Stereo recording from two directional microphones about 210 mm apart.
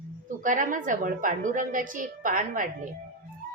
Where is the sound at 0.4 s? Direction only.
40° right (ahead or behind).